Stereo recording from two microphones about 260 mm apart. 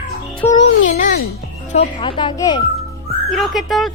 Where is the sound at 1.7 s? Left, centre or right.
Centre.